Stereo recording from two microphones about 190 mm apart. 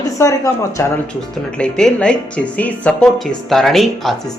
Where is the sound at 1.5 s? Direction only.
5° left (ahead or behind).